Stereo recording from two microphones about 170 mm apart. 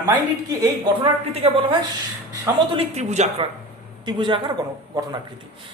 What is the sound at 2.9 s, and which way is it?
Speech, 40° right (ahead or behind).